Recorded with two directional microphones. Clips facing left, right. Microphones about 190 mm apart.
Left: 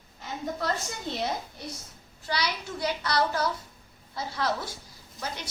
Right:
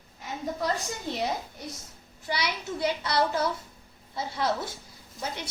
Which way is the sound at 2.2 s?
25° right (ahead or behind).